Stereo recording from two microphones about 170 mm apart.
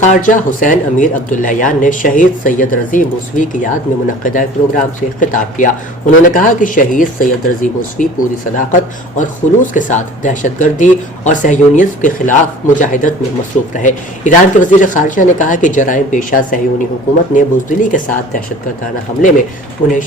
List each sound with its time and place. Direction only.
0.0 s speech: 45° left (ahead or behind)